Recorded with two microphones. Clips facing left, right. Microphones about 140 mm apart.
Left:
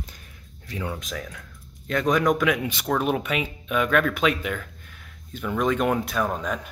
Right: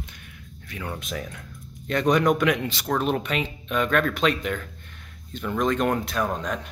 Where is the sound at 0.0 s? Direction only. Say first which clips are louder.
Right 1 dB; 35° left (ahead or behind).